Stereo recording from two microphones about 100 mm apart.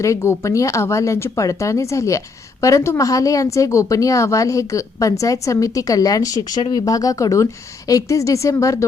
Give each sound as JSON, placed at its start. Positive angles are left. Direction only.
{"t": 0.0, "sound": "a woman's voice", "side_deg": 30}